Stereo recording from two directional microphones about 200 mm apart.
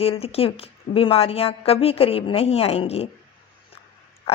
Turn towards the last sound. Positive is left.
turn(degrees=30)  # may be behind; listen again after turning